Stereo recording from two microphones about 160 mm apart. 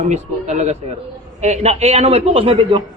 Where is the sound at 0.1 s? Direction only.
45° right (ahead or behind).